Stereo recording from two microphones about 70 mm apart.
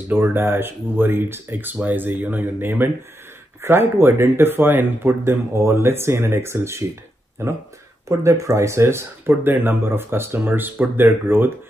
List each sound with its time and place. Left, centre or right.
0.1 s speech: right
8.1 s speech: right